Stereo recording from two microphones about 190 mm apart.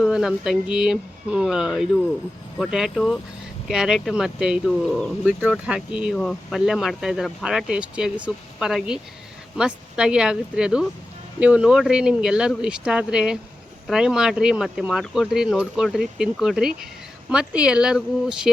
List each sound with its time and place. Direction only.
0.0 s speech: centre (ahead or behind)